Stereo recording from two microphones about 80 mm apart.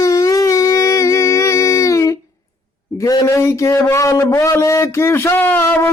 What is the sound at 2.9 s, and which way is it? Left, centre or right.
Speech, left.